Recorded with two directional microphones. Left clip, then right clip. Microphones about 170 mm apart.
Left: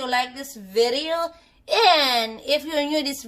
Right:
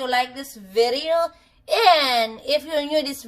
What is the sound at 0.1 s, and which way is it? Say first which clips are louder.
Speech: even; 20° left (ahead or behind).